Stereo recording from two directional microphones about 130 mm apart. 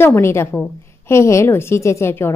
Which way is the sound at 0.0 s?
20° left (ahead or behind).